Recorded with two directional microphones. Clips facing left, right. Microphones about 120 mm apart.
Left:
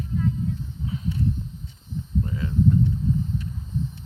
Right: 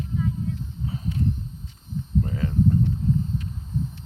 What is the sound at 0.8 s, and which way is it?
Horse, 40° right (ahead or behind).